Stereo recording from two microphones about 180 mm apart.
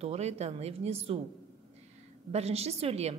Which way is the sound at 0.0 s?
35° right (ahead or behind).